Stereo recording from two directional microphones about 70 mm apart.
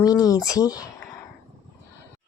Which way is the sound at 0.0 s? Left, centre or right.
Left.